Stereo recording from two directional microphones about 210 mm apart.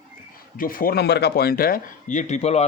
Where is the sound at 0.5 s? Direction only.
40° left (ahead or behind).